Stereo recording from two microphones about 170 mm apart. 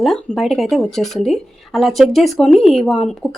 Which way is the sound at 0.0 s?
Centre (ahead or behind).